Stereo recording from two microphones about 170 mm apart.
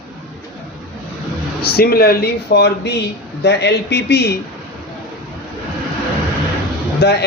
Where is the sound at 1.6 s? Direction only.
65° left (ahead or behind).